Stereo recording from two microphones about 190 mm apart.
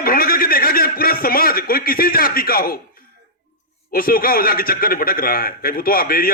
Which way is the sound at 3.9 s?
50° left (ahead or behind).